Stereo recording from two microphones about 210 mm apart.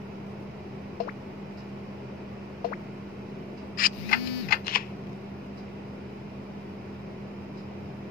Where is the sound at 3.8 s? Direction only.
45° left (ahead or behind).